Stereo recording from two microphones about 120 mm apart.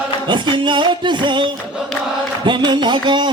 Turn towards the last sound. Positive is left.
turn(degrees=-40)  # may be behind; listen again after turning